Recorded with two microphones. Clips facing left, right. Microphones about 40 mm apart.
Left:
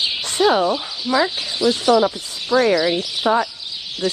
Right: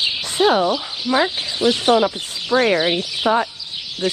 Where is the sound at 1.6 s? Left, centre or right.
Right.